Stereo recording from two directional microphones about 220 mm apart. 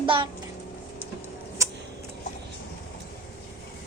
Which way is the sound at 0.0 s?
25° right (ahead or behind).